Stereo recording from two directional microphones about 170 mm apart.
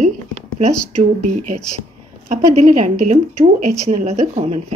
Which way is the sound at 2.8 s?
40° right (ahead or behind).